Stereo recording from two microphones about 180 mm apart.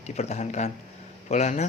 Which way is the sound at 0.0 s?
40° left (ahead or behind).